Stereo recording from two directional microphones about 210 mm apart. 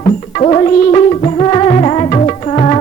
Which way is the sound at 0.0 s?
25° left (ahead or behind).